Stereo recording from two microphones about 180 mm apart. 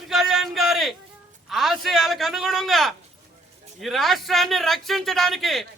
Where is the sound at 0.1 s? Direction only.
Centre (ahead or behind).